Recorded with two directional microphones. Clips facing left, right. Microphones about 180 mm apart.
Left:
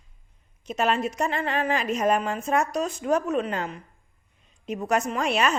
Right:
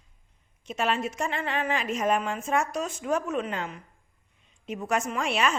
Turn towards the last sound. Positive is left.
turn(degrees=40)  # may be behind; listen again after turning